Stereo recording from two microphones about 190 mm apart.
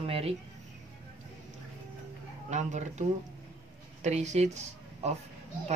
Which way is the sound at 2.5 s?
40° right (ahead or behind).